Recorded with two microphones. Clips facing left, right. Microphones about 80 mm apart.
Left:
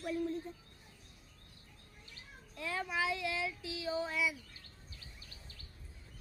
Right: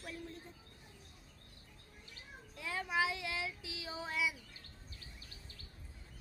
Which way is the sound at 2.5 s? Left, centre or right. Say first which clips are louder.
Even; centre.